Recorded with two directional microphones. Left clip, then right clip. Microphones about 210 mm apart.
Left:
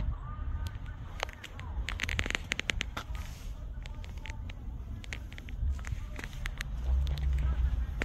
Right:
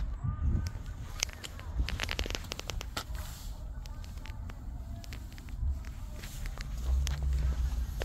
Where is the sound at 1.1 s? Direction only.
35° right (ahead or behind).